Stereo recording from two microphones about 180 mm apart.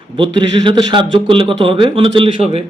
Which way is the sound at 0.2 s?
25° right (ahead or behind).